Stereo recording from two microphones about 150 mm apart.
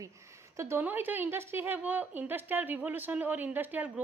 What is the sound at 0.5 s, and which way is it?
A woman's voice, 20° right (ahead or behind).